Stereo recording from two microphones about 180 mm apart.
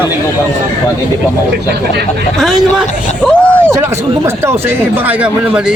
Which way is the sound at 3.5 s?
5° left (ahead or behind).